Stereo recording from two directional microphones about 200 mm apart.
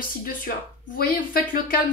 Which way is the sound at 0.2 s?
45° left (ahead or behind).